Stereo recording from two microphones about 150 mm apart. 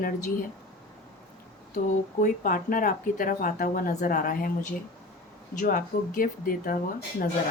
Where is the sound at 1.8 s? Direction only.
60° left (ahead or behind).